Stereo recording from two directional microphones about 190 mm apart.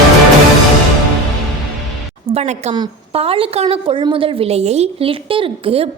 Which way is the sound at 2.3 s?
35° right (ahead or behind).